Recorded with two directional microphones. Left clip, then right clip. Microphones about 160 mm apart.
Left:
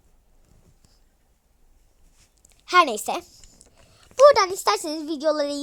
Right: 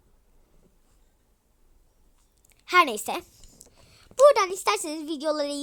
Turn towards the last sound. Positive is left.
turn(degrees=0)  # may be behind; listen again after turning